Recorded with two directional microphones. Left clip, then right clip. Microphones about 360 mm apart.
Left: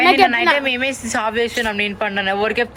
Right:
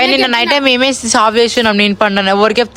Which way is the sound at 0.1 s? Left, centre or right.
Centre.